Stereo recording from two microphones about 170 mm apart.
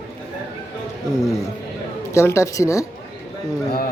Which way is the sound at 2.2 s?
15° left (ahead or behind).